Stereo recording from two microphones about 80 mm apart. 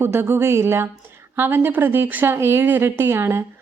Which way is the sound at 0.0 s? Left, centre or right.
Right.